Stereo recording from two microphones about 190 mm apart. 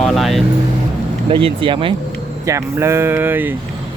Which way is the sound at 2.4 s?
15° right (ahead or behind).